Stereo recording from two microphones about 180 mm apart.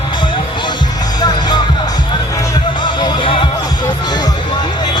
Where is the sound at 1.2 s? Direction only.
25° left (ahead or behind).